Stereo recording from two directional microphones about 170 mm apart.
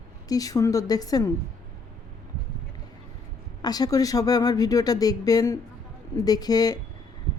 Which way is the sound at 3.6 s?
25° left (ahead or behind).